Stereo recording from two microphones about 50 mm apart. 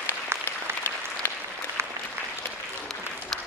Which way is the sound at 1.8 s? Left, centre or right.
Right.